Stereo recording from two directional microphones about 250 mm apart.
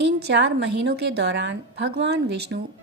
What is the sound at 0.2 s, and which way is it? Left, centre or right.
A woman's voice, right.